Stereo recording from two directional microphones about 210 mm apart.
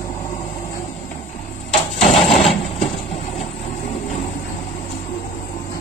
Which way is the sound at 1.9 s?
30° left (ahead or behind).